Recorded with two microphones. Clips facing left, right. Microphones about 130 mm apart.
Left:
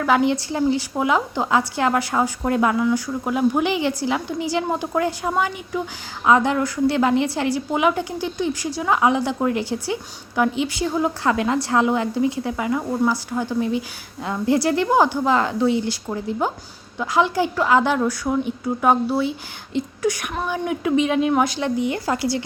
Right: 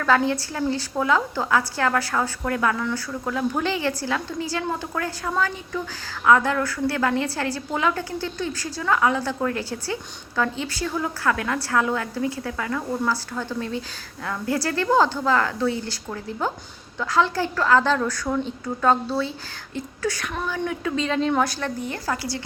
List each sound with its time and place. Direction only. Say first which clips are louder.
0.0 s a woman's voice: left 2 dB; 15° left (ahead or behind)